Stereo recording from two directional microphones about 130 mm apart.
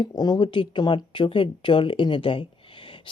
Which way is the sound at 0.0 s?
30° left (ahead or behind).